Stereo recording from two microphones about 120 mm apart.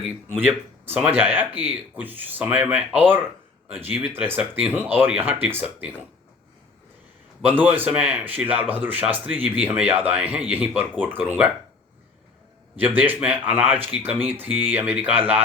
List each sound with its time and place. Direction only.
0.3 s speech: 15° right (ahead or behind)
7.4 s speech: 15° right (ahead or behind)
12.7 s speech: 15° right (ahead or behind)